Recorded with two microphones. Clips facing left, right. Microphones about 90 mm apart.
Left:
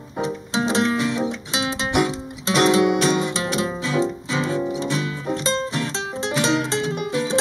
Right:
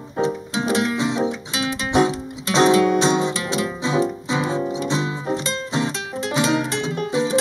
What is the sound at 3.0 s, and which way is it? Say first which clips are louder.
Music: right 1 dB; 20° right (ahead or behind).